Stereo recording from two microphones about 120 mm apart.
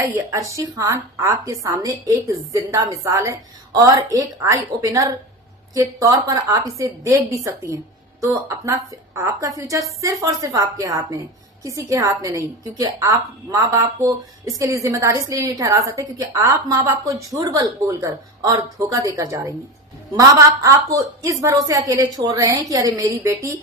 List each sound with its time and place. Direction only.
0.0 s a woman's voice: 25° right (ahead or behind)